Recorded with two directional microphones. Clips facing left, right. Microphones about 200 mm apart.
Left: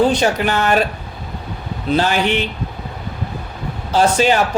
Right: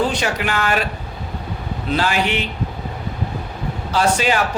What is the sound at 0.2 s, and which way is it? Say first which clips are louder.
Speech: left 5 dB; 40° left (ahead or behind).